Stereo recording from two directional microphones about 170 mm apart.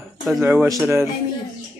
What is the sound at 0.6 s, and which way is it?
Speech, 20° right (ahead or behind).